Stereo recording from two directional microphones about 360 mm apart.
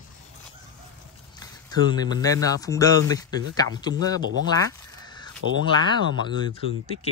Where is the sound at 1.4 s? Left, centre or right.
Centre.